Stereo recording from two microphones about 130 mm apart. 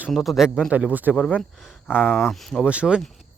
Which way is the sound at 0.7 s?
10° right (ahead or behind).